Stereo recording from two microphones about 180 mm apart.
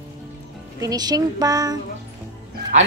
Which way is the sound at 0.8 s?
20° right (ahead or behind).